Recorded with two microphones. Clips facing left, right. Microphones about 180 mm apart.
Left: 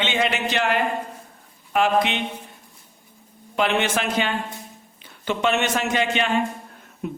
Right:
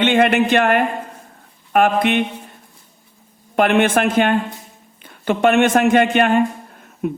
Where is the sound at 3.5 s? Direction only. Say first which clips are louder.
Right 7 dB; 55° right (ahead or behind).